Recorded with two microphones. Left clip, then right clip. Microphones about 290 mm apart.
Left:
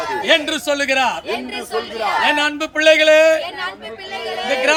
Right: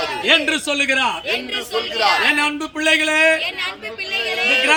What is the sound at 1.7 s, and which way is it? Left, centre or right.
Speech, left.